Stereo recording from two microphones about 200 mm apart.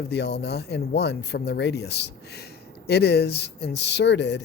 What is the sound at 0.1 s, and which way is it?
Speech, 55° left (ahead or behind).